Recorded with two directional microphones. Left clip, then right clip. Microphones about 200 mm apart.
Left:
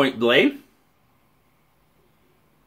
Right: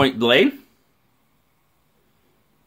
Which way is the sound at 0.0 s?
45° right (ahead or behind).